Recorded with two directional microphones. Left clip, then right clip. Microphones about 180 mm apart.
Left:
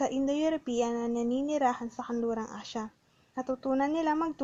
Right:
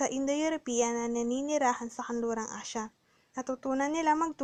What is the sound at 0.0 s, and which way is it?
Speech, 25° right (ahead or behind).